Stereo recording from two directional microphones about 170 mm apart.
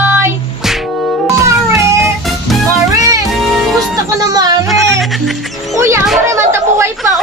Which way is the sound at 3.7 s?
20° right (ahead or behind).